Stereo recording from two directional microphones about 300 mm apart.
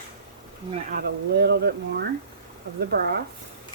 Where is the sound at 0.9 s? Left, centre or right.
Right.